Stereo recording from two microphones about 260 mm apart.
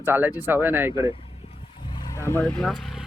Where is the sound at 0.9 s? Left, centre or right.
Centre.